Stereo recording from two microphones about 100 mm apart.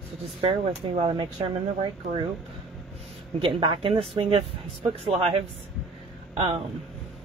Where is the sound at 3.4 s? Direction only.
60° right (ahead or behind).